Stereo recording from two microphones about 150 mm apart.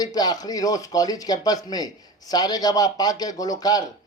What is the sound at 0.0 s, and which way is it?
Speech, 25° left (ahead or behind).